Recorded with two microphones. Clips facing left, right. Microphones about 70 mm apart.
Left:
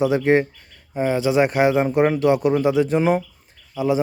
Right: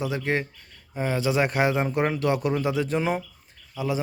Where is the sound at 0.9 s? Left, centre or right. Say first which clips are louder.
Left 6 dB; centre.